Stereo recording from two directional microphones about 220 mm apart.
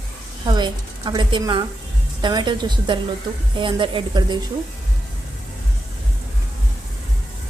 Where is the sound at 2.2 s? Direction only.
20° right (ahead or behind).